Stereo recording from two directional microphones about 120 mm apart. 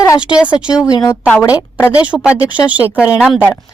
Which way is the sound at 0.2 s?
10° right (ahead or behind).